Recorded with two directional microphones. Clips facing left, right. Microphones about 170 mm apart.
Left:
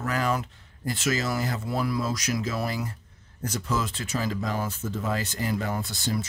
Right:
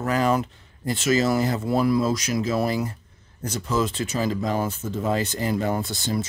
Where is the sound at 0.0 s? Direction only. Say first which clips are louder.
Right 5 dB; 25° right (ahead or behind).